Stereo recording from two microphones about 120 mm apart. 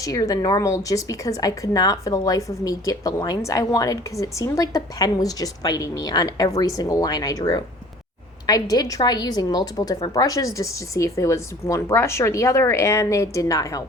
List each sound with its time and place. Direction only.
0.0 s a woman's voice: 30° left (ahead or behind)